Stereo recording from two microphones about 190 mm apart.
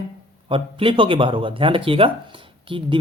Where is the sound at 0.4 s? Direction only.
30° right (ahead or behind).